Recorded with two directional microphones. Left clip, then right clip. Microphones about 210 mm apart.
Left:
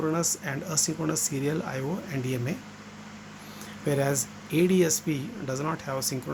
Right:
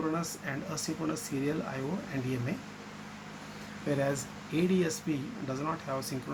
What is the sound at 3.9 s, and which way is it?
Speech, 55° left (ahead or behind).